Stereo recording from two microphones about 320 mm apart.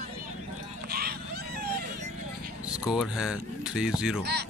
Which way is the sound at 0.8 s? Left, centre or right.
Right.